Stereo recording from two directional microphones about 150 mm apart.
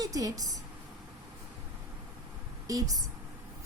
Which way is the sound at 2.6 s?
25° right (ahead or behind).